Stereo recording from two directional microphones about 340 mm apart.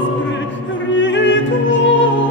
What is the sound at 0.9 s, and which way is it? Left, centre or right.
Music, left.